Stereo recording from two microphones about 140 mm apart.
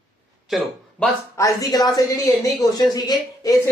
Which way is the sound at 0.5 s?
Centre (ahead or behind).